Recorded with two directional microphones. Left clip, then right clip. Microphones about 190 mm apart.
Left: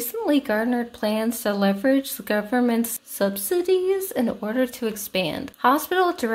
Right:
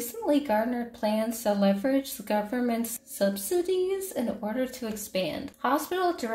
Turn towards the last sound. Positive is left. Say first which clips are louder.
# left 6 dB
turn(degrees=40)  # may be behind; listen again after turning